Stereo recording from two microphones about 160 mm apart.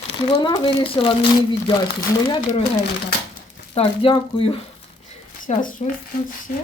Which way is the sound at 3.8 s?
40° left (ahead or behind).